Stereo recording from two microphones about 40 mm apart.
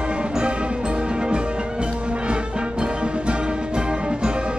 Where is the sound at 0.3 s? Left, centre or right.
Right.